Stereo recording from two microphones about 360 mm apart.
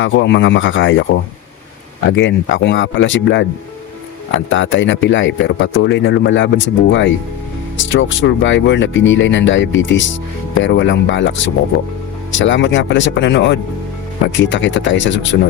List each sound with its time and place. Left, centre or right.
0.0 s speech: left
2.0 s speech: left